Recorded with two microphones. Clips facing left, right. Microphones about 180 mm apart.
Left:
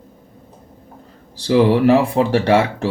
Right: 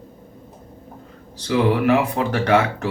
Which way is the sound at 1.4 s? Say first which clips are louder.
Left 5 dB; 35° left (ahead or behind).